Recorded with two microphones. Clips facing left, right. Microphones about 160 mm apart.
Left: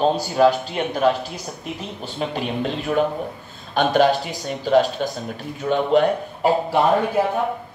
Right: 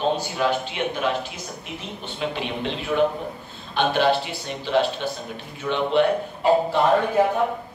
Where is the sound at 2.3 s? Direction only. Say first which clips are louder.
Left 3 dB; 40° left (ahead or behind).